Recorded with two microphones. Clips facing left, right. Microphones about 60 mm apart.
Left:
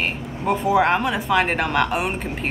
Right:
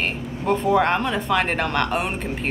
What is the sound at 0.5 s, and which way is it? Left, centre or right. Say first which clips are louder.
Speech: left 1 dB; centre.